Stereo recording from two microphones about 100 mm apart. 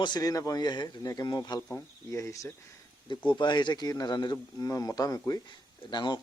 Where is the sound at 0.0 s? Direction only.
40° left (ahead or behind).